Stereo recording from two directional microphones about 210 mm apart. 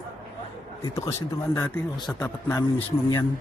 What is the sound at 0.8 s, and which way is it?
Speech, 15° left (ahead or behind).